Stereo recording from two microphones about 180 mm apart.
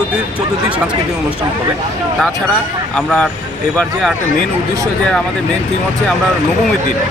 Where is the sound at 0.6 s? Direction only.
5° right (ahead or behind).